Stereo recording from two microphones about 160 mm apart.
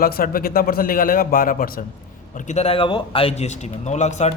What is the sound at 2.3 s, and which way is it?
A man's voice, 50° left (ahead or behind).